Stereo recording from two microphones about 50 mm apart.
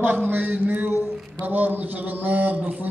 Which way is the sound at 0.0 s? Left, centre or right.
Right.